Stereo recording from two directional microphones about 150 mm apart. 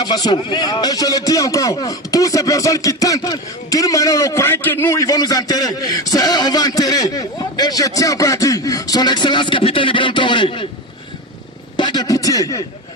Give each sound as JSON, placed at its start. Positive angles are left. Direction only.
{"t": 0.0, "sound": "a man's voice", "side_deg": 30}
{"t": 11.8, "sound": "a man's voice", "side_deg": 30}